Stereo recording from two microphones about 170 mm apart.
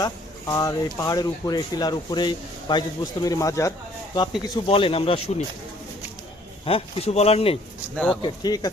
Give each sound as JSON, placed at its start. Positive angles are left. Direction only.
{"t": 0.0, "sound": "speech", "side_deg": 20}
{"t": 6.7, "sound": "speech", "side_deg": 35}
{"t": 7.9, "sound": "speech", "side_deg": 5}
{"t": 8.2, "sound": "speech", "side_deg": 25}